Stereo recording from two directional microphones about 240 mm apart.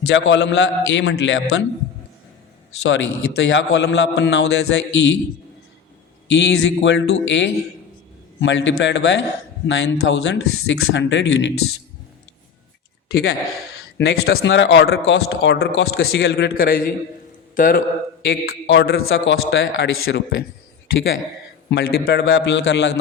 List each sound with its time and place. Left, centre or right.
0.1 s speech: left
2.8 s speech: left
6.2 s speech: left
13.1 s a man's voice: left
18.3 s speech: left
21.7 s speech: left